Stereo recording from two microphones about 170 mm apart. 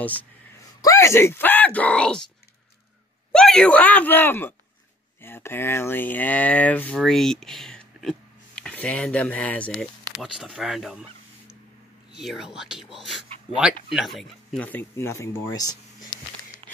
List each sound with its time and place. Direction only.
0.8 s speech: 15° left (ahead or behind)
3.3 s speech: 5° left (ahead or behind)
12.1 s speech: centre (ahead or behind); by 15.8 s 20° left (ahead or behind)
16.6 s a sound: 35° right (ahead or behind)